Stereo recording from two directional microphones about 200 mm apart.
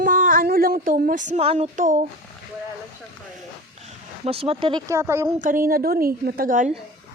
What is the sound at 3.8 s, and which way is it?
Speech, 30° right (ahead or behind).